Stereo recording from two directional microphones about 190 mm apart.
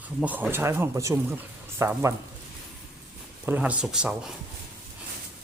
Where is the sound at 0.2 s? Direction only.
5° right (ahead or behind).